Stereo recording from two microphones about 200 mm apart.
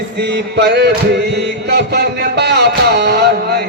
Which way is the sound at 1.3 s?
55° right (ahead or behind).